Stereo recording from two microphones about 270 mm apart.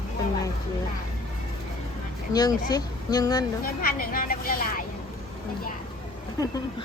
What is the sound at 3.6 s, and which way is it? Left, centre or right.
A woman's voice, left.